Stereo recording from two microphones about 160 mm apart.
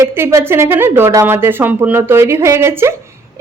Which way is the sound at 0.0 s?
15° right (ahead or behind).